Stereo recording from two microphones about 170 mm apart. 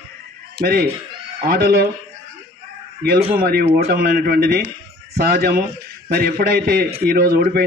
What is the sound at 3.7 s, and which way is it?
A man's voice, 65° right (ahead or behind).